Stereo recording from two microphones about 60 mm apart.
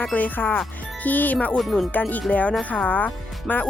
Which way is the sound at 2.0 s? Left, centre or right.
Left.